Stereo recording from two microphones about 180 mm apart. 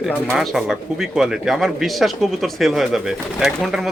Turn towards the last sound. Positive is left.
turn(degrees=0)  # may be behind; listen again after turning